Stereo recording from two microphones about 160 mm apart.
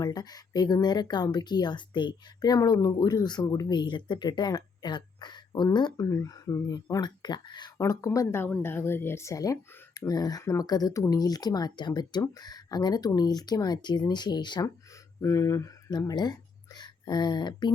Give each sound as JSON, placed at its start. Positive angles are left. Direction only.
{"t": 0.0, "sound": "speech", "side_deg": 25}